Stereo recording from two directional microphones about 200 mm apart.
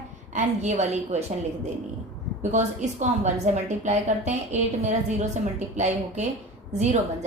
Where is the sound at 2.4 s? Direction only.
35° right (ahead or behind).